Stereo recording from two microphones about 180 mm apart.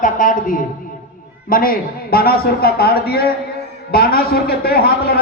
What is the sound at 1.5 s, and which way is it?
A man's voice, 55° left (ahead or behind).